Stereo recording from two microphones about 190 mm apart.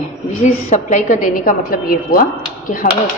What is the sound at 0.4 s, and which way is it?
A woman's voice, 40° left (ahead or behind).